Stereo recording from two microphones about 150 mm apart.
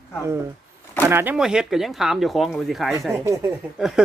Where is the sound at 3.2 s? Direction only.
20° right (ahead or behind).